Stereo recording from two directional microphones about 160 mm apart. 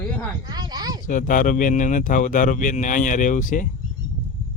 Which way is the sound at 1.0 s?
55° left (ahead or behind).